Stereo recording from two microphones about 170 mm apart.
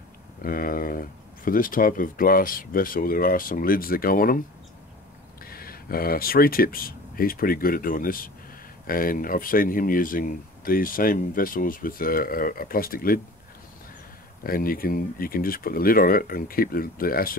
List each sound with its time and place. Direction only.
0.4 s speech: 55° left (ahead or behind)
5.4 s speech: 60° left (ahead or behind)
14.4 s speech: 60° left (ahead or behind)